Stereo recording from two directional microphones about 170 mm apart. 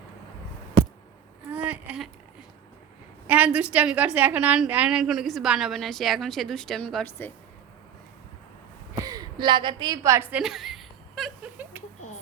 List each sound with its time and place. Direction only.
1.5 s a sound: 10° right (ahead or behind)
3.2 s a woman's voice: 10° right (ahead or behind); by 7.3 s 10° left (ahead or behind)
9.0 s a woman's voice: 25° right (ahead or behind); by 11.3 s centre (ahead or behind)